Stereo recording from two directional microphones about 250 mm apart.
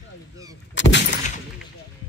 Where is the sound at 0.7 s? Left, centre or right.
Left.